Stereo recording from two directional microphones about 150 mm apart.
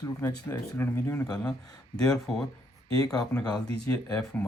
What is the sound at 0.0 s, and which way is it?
Speech, 25° left (ahead or behind).